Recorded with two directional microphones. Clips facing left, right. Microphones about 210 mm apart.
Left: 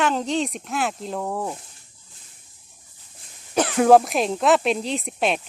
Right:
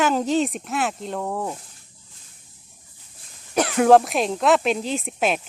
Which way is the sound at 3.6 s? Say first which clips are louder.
Even; centre (ahead or behind).